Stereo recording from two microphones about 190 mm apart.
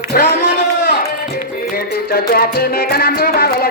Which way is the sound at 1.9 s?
55° left (ahead or behind).